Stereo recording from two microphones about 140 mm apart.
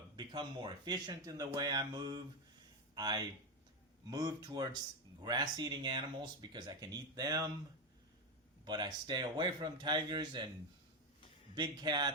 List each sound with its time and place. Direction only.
0.2 s speech: 35° right (ahead or behind)
1.5 s mantra: 25° right (ahead or behind)
2.9 s speech: 30° right (ahead or behind)
4.1 s mantra: 25° right (ahead or behind)
5.2 s speech: 30° right (ahead or behind)
8.6 s speech: 30° right (ahead or behind)
11.5 s speech: 30° right (ahead or behind)